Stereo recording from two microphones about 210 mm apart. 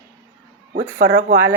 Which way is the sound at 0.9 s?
55° right (ahead or behind).